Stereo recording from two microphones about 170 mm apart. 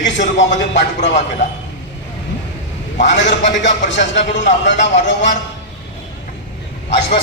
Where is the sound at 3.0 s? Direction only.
90° left.